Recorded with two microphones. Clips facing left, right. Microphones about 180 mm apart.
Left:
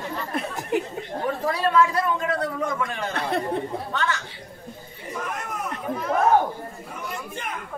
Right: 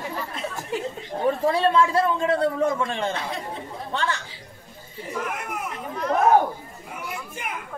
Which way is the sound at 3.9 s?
30° right (ahead or behind).